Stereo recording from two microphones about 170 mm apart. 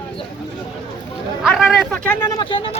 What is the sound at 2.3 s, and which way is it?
Speech, 30° left (ahead or behind).